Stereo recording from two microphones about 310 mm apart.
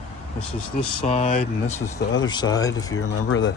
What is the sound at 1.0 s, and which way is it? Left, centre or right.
Speech, centre.